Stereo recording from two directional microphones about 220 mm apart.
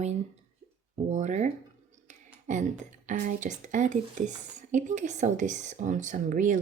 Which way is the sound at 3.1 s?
35° right (ahead or behind).